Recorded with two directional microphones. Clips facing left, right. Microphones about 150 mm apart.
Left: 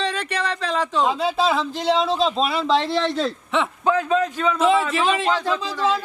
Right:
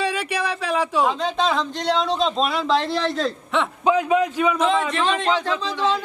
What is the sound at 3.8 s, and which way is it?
Speech, 15° right (ahead or behind).